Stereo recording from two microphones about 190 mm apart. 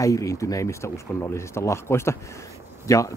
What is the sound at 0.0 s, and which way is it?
Speech, 15° left (ahead or behind).